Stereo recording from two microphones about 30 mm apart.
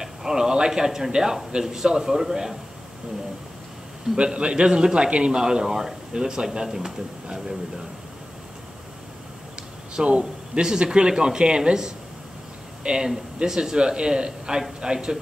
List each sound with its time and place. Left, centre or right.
0.0 s a man's voice: centre
4.2 s a man's voice: right; by 7.5 s centre
9.9 s speech: right
12.8 s speech: right